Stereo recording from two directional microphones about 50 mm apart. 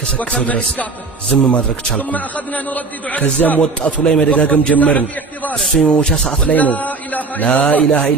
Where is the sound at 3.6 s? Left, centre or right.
Left.